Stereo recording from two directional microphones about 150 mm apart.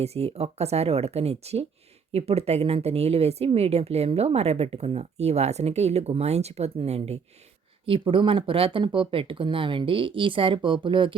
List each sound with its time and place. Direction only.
0.0 s speech: 45° right (ahead or behind)